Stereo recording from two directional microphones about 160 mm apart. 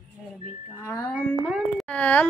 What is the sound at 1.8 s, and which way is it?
Speech, 10° left (ahead or behind).